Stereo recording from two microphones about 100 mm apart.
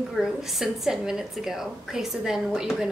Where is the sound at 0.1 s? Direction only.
5° right (ahead or behind).